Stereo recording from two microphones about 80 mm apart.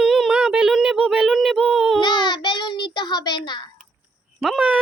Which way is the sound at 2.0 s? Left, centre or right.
Left.